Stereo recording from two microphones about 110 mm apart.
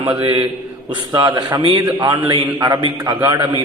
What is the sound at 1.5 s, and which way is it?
A man's voice, 50° right (ahead or behind).